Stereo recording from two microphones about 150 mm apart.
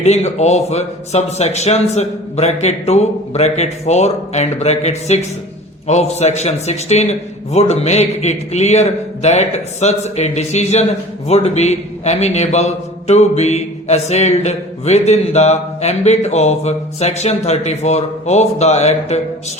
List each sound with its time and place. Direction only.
0.0 s a man's voice: 50° left (ahead or behind)